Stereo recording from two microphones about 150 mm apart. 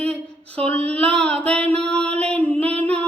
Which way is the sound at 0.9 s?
10° left (ahead or behind).